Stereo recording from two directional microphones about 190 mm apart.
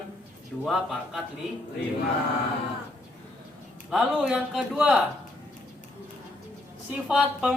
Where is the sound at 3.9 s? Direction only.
Centre (ahead or behind).